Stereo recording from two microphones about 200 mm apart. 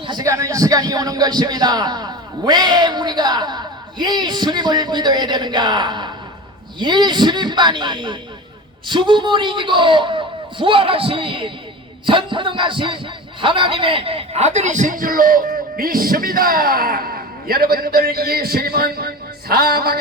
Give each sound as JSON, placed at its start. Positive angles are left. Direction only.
{"t": 0.1, "sound": "a man's voice", "side_deg": -15}